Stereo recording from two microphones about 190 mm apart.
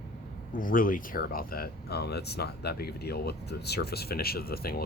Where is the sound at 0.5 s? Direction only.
45° left (ahead or behind).